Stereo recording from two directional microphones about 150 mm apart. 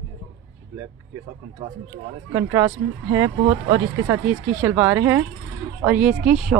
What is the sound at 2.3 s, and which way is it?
Speech, 20° right (ahead or behind).